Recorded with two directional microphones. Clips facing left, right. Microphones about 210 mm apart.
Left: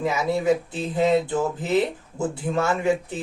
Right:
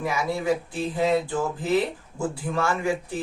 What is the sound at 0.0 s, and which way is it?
Speech, 20° left (ahead or behind).